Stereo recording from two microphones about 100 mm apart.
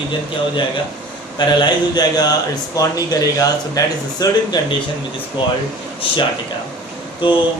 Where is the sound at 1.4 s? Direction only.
45° left (ahead or behind).